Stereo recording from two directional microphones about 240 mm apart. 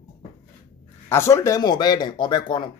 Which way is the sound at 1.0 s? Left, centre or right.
Centre.